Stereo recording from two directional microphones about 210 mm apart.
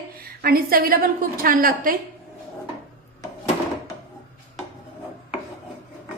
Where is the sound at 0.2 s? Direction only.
45° right (ahead or behind).